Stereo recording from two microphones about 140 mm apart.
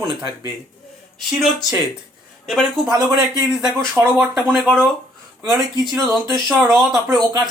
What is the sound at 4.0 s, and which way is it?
Speech, 20° right (ahead or behind).